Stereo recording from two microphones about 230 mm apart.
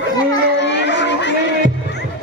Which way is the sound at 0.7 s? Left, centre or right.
Left.